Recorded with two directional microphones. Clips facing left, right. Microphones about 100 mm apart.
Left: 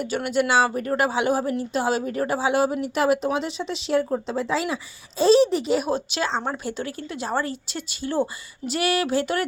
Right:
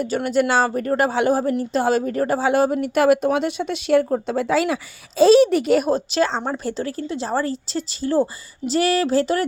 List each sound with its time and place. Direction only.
0.0 s a woman's voice: 40° right (ahead or behind); by 5.8 s 60° right (ahead or behind)
5.9 s a woman's voice: 40° right (ahead or behind)